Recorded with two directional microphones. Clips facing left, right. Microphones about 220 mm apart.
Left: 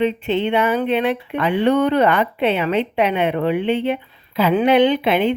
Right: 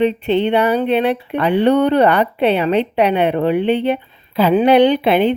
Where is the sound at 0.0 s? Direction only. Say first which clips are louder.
Right 4 dB; 35° right (ahead or behind).